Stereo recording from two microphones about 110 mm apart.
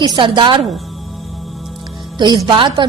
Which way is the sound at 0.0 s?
45° right (ahead or behind).